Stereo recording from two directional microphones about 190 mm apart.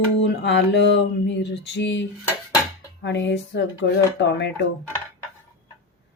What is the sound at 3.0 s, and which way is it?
Speech, 65° left (ahead or behind).